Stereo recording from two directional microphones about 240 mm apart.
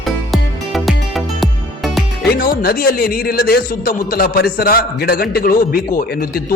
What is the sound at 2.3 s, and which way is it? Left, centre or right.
A man's voice, left.